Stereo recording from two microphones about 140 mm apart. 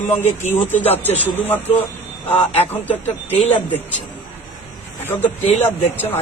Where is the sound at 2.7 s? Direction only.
15° left (ahead or behind).